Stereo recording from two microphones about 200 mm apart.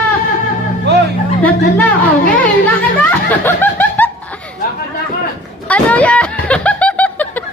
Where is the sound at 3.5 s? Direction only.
10° left (ahead or behind).